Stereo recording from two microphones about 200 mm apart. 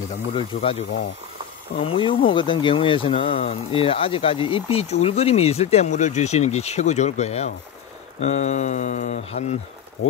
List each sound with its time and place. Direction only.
0.3 s speech: 25° left (ahead or behind)